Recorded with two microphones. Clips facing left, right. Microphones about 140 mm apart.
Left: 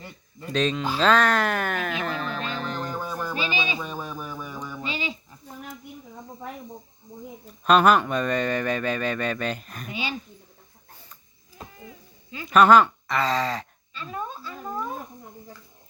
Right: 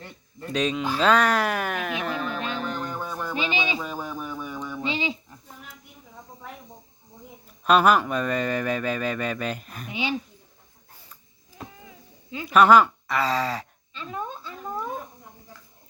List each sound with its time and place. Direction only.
0.0 s a sound: 5° left (ahead or behind)
0.5 s speech: 10° right (ahead or behind)
3.3 s music: 20° right (ahead or behind)
3.8 s music: 5° right (ahead or behind)
4.8 s a sound: 20° right (ahead or behind)
7.6 s speech: 5° right (ahead or behind)
9.9 s speech: 20° right (ahead or behind)
12.5 s speech: 5° right (ahead or behind)
13.9 s speech: 20° right (ahead or behind)